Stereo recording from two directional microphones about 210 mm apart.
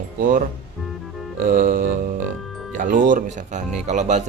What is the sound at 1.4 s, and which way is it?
Music, 40° right (ahead or behind).